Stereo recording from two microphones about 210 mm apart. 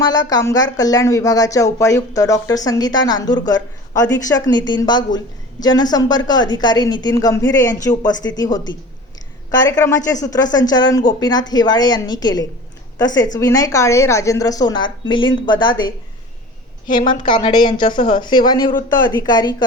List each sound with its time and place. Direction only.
0.3 s a woman's voice: 20° left (ahead or behind)
16.8 s a woman's voice: 40° left (ahead or behind)
17.2 s a woman's voice: 25° left (ahead or behind)